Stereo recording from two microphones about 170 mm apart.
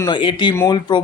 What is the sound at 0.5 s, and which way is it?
Speech, 15° left (ahead or behind).